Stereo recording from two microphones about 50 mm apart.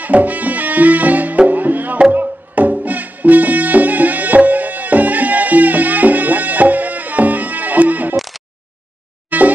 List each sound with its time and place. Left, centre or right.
0.0 s music: right
9.3 s music: right